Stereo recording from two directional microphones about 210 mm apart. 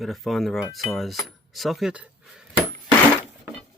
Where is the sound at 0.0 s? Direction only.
Centre (ahead or behind).